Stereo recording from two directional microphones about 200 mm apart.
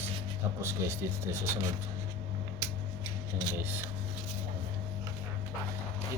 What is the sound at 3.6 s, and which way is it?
Speech, 10° right (ahead or behind).